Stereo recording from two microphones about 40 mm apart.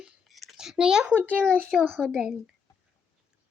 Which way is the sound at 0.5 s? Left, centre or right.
Centre.